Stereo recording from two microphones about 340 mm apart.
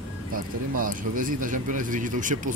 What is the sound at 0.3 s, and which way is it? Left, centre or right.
Speech, right.